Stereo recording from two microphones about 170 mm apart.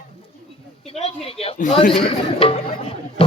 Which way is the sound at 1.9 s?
35° left (ahead or behind).